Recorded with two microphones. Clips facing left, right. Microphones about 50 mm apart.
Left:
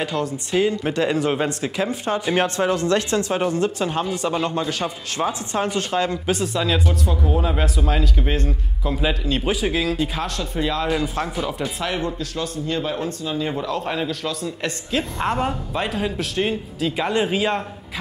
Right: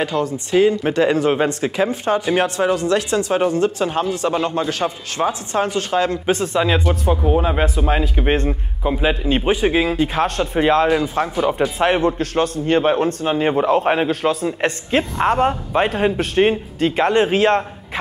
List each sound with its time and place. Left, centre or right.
0.1 s a man's voice: right
0.5 s a man's voice: centre
2.4 s a man's voice: centre
6.5 s a man's voice: right
10.2 s a man's voice: right
10.9 s a man's voice: centre
11.8 s a man's voice: right
15.3 s a man's voice: right
15.9 s a man's voice: right